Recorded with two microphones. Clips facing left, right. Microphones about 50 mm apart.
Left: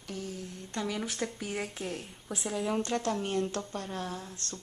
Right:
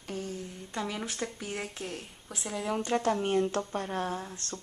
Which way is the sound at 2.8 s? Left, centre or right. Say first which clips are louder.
Right 3 dB; centre.